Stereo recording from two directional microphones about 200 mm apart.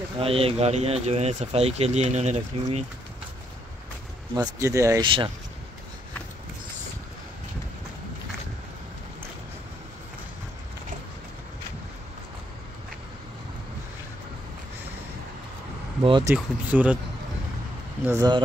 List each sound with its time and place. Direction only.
0.2 s speech: 30° right (ahead or behind)
4.4 s speech: 15° right (ahead or behind)
16.0 s speech: 25° right (ahead or behind)
16.3 s speech: 5° right (ahead or behind)
18.0 s speech: 15° right (ahead or behind)